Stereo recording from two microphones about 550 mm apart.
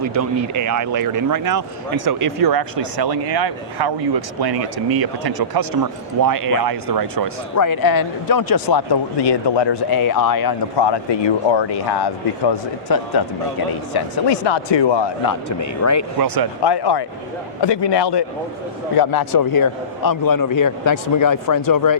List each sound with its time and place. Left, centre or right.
0.0 s speech: right
4.5 s speech: right
5.2 s speech: right
7.5 s speech: left
15.6 s speech: left
16.2 s speech: right
16.6 s speech: left